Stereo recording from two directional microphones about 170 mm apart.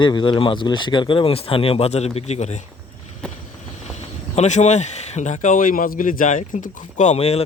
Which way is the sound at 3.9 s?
40° left (ahead or behind).